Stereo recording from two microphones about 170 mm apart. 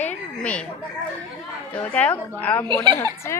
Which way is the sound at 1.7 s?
10° left (ahead or behind).